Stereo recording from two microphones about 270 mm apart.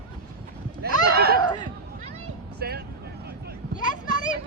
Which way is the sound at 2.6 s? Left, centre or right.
Right.